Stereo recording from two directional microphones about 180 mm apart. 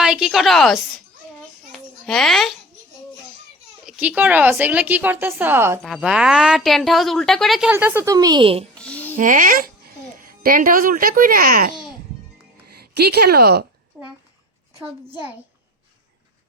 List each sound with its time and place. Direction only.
0.0 s a woman's voice: 5° right (ahead or behind)
1.7 s babbling: centre (ahead or behind)
3.8 s a woman's voice: 5° right (ahead or behind)
5.8 s a woman's voice: centre (ahead or behind)
7.7 s a woman's voice: 10° right (ahead or behind); by 8.6 s 30° right (ahead or behind)
8.7 s a sound: 5° left (ahead or behind)
9.1 s a woman's voice: 45° right (ahead or behind)
14.0 s a sound: 5° left (ahead or behind)
15.1 s a woman's voice: 10° right (ahead or behind)